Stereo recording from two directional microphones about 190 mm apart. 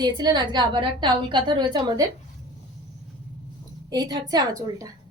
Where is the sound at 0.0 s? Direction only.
20° right (ahead or behind).